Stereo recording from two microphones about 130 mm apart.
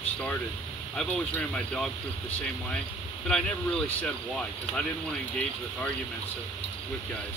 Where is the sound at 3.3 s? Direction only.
5° left (ahead or behind).